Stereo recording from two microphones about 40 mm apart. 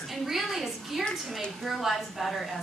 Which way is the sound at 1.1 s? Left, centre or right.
Centre.